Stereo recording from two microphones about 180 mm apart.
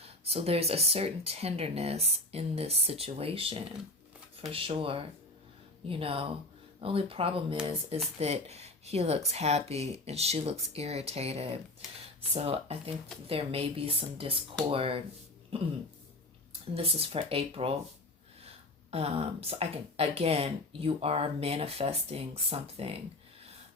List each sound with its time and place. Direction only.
0.0 s speech: 35° right (ahead or behind)